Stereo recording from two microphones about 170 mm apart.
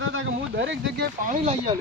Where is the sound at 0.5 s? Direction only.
90° right.